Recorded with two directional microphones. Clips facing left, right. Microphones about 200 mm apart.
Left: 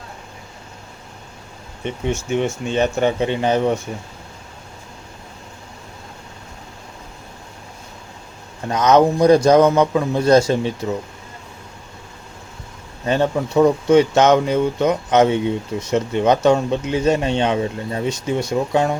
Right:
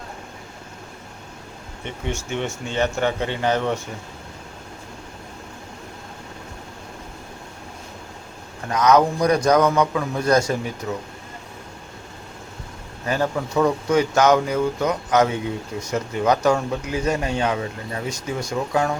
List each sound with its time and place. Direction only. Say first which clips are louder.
1.8 s speech: left 6 dB; 20° left (ahead or behind)
8.7 s speech: left 3 dB; 25° left (ahead or behind)
13.1 s speech: left 5 dB; 25° left (ahead or behind)